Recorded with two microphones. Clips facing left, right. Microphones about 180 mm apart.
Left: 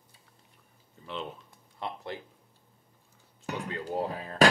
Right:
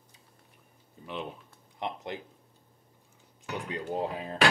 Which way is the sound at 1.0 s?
15° right (ahead or behind).